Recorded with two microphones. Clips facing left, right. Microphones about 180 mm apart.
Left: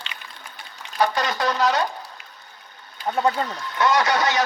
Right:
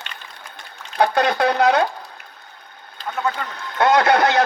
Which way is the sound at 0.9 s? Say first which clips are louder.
Right 5 dB; 60° right (ahead or behind).